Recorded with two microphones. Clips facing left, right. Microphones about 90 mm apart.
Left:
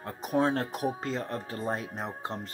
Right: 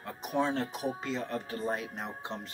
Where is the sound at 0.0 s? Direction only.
45° left (ahead or behind).